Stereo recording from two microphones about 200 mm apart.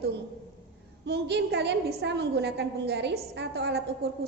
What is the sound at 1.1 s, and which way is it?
A woman's voice, 55° right (ahead or behind).